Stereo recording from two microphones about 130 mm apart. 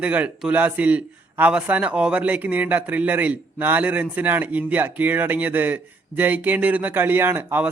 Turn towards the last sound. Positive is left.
turn(degrees=-15)  # may be behind; listen again after turning